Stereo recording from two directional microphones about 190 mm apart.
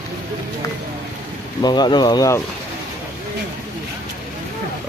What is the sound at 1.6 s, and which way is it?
Speech, 20° left (ahead or behind).